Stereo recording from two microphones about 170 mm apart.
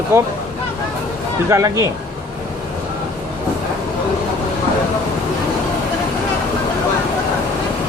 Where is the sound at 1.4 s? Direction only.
20° right (ahead or behind).